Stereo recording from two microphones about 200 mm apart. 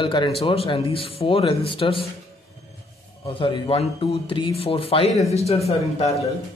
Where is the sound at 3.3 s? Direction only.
25° left (ahead or behind).